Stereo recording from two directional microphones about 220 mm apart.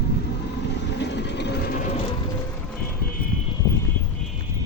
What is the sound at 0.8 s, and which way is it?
Vehicle, 50° left (ahead or behind).